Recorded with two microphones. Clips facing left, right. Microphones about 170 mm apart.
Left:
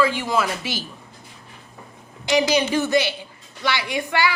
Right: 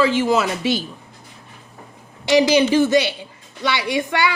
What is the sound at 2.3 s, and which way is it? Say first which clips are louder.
A woman's voice: right 5 dB; 20° right (ahead or behind).